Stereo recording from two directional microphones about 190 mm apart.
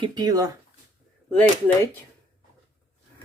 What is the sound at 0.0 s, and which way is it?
Speech, 20° right (ahead or behind).